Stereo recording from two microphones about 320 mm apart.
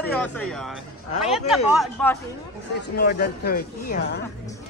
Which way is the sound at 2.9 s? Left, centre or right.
Left.